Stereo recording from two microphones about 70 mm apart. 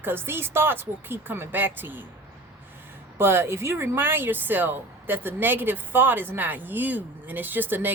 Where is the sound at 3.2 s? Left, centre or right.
Right.